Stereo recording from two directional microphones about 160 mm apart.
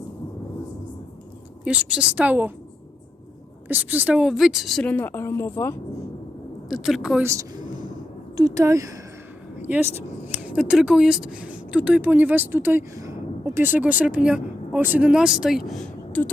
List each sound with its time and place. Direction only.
1.6 s speech: 10° right (ahead or behind)
3.7 s a woman's voice: 10° right (ahead or behind); by 5.7 s 15° left (ahead or behind)
6.7 s a woman's voice: centre (ahead or behind)
7.2 s speech: 20° right (ahead or behind); by 16.3 s 5° left (ahead or behind)